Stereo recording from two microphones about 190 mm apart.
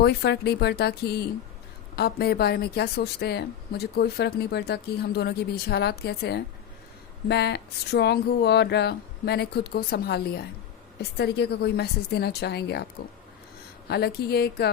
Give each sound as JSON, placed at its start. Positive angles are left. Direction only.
{"t": 0.0, "sound": "speech", "side_deg": 60}